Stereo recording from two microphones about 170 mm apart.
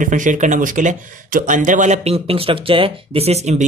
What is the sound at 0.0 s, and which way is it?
Speech, 50° right (ahead or behind).